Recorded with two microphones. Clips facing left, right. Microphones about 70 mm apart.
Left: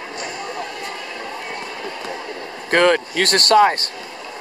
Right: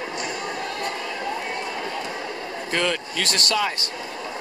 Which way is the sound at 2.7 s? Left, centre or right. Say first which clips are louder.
Left 10 dB; left.